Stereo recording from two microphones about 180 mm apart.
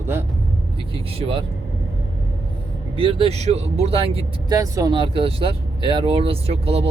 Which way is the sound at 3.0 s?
30° right (ahead or behind).